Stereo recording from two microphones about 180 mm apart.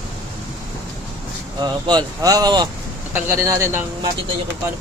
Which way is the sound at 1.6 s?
25° right (ahead or behind).